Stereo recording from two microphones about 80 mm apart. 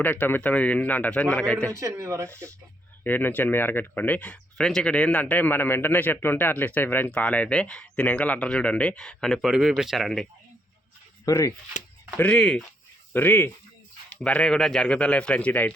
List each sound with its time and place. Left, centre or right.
0.0 s a man's voice: left
1.8 s speech: right
3.0 s speech: left; by 10.2 s centre
11.3 s speech: left
12.1 s speech: centre
13.1 s a man's voice: left
14.3 s speech: centre